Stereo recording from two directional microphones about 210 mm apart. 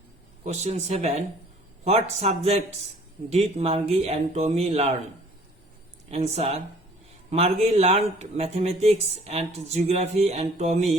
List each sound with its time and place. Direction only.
0.4 s speech: 30° right (ahead or behind)
6.1 s speech: 30° right (ahead or behind)